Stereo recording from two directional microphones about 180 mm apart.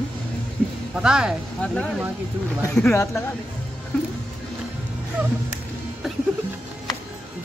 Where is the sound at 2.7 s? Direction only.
15° left (ahead or behind).